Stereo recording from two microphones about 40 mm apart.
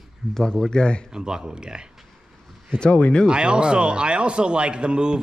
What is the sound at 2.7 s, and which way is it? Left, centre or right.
Speech, left.